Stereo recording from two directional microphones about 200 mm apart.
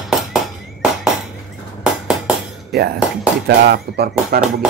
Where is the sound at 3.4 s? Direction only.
55° right (ahead or behind).